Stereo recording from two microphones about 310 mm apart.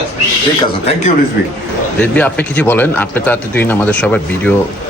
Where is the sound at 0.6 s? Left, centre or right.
Centre.